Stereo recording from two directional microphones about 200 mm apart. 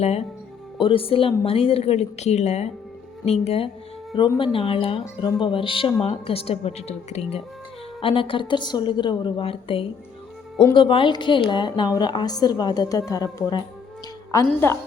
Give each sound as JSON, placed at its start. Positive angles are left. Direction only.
{"t": 0.0, "sound": "a woman's voice", "side_deg": 30}